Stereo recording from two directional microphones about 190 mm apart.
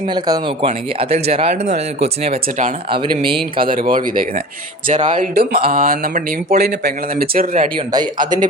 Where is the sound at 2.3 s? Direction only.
45° right (ahead or behind).